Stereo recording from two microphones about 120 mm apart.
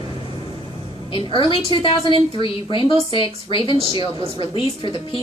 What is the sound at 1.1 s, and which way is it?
A woman's voice, 45° left (ahead or behind).